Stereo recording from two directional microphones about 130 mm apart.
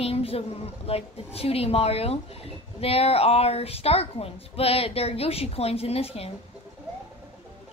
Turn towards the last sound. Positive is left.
turn(degrees=50)  # may be behind; listen again after turning